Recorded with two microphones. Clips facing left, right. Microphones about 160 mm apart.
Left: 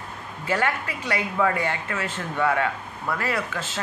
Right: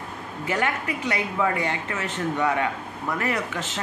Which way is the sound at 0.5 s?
20° right (ahead or behind).